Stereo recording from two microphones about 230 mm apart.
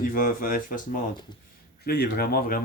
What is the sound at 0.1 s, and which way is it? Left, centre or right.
Speech, left.